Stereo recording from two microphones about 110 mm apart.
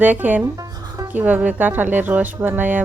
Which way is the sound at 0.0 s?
15° right (ahead or behind).